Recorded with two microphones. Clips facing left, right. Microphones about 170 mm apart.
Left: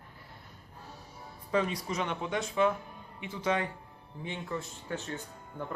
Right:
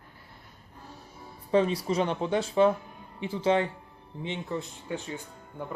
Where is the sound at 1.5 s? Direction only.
30° right (ahead or behind).